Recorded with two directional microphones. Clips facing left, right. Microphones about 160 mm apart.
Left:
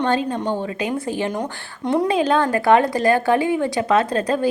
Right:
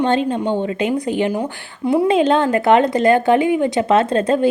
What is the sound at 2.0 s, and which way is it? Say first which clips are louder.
A woman's voice: right 4 dB; 25° right (ahead or behind).